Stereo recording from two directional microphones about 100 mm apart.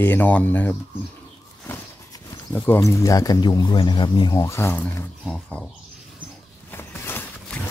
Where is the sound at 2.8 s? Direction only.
30° left (ahead or behind); by 4.3 s 50° left (ahead or behind).